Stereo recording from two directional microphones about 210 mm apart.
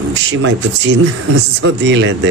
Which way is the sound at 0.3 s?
60° right (ahead or behind).